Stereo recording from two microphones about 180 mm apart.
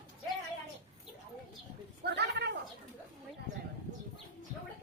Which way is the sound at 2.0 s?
70° right (ahead or behind).